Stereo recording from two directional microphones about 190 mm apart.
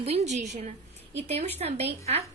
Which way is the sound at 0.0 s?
35° right (ahead or behind).